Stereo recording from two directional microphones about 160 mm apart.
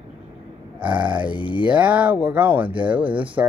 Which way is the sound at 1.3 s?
30° left (ahead or behind).